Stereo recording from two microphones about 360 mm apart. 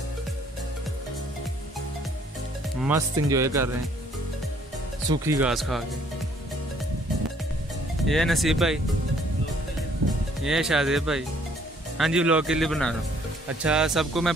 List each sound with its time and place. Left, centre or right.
2.8 s speech: centre
5.1 s speech: centre
8.1 s speech: centre
10.4 s speech: centre